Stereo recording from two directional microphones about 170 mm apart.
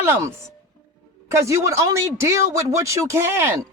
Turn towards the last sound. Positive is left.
turn(degrees=-15)  # may be behind; listen again after turning